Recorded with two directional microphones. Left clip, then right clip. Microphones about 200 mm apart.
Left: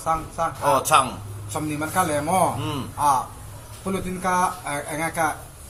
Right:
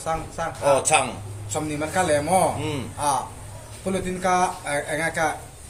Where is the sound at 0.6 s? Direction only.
20° left (ahead or behind).